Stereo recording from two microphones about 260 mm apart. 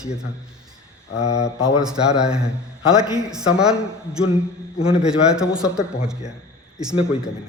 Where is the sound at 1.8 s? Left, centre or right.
Centre.